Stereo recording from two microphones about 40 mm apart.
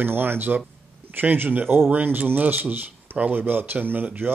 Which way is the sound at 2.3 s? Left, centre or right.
Right.